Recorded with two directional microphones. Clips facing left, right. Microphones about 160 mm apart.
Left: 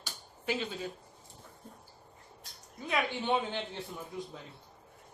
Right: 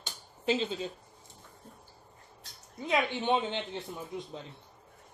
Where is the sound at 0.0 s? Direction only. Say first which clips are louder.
Right 5 dB; 25° right (ahead or behind).